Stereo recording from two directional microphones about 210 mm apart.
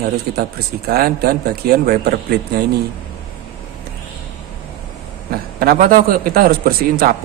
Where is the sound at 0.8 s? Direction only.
50° right (ahead or behind).